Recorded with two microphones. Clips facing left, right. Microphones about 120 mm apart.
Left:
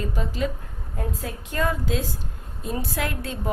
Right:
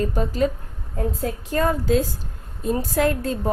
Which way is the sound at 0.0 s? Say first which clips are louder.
Right 6 dB; 45° right (ahead or behind).